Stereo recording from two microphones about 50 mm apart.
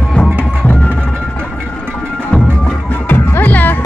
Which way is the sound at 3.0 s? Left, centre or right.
Left.